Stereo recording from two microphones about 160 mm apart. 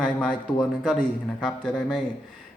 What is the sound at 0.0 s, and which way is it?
A man's voice, 5° left (ahead or behind).